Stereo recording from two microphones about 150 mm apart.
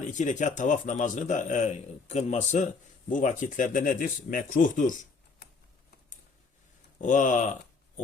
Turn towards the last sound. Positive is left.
turn(degrees=55)  # may be behind; listen again after turning